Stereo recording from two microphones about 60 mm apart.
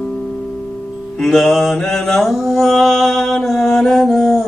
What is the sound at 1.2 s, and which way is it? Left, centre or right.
Music, centre.